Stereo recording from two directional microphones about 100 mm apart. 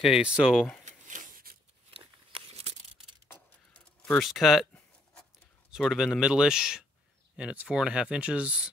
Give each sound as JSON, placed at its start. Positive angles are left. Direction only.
{"t": 0.0, "sound": "speech", "side_deg": -5}
{"t": 1.9, "sound": "a sound", "side_deg": -75}
{"t": 4.2, "sound": "speech", "side_deg": 0}
{"t": 5.8, "sound": "speech", "side_deg": 0}